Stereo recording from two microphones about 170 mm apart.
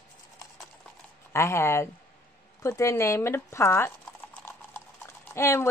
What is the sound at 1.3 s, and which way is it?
Speech, 15° left (ahead or behind).